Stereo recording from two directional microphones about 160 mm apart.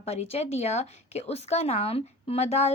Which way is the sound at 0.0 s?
40° left (ahead or behind).